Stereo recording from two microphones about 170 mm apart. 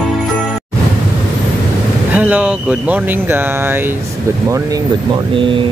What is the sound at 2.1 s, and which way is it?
Speech, 10° right (ahead or behind).